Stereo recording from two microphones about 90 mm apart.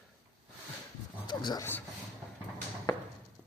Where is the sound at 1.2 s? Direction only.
55° left (ahead or behind).